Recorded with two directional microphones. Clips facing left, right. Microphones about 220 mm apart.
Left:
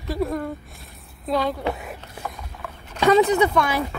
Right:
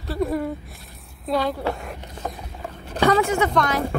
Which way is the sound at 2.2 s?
40° right (ahead or behind).